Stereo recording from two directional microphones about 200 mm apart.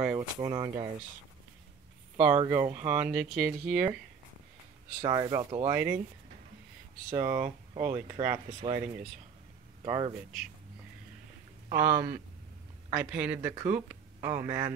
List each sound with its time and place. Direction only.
0.0 s speech: 15° right (ahead or behind)
2.3 s speech: 20° right (ahead or behind)
3.0 s speech: 5° right (ahead or behind)
5.0 s speech: 20° right (ahead or behind)
7.1 s speech: 15° right (ahead or behind)
8.5 s speech: 30° right (ahead or behind)
11.7 s speech: 10° right (ahead or behind)